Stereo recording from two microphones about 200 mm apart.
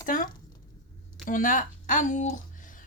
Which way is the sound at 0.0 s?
40° left (ahead or behind).